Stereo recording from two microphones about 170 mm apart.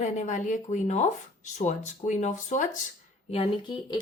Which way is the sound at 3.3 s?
30° left (ahead or behind).